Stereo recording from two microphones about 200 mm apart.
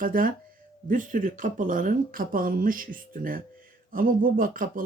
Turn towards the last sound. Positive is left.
turn(degrees=-45)  # may be behind; listen again after turning